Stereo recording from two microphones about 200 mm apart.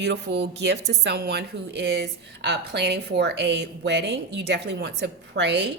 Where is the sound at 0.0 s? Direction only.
60° right (ahead or behind).